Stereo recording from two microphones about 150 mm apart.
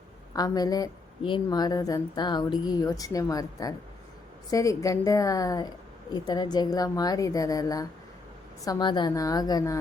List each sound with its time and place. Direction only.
0.3 s speech: 25° left (ahead or behind)